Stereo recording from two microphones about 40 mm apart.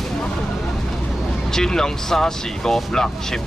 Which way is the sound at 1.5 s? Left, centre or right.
Centre.